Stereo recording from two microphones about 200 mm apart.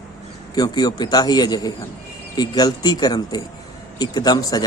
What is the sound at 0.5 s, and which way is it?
A man's voice, 20° left (ahead or behind).